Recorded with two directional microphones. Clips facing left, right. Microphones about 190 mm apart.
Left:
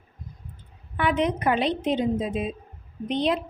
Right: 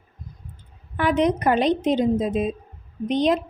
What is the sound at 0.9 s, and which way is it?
A woman's voice, 40° right (ahead or behind).